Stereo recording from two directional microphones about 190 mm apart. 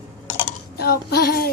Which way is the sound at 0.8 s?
55° left (ahead or behind).